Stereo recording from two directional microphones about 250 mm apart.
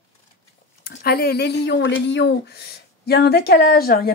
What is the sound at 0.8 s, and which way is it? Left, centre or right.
A woman's voice, left.